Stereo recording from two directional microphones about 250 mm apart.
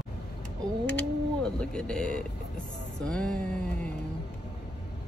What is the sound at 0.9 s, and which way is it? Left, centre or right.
Speech, centre.